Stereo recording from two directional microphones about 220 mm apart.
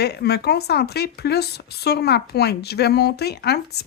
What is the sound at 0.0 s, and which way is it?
Speech, 45° left (ahead or behind).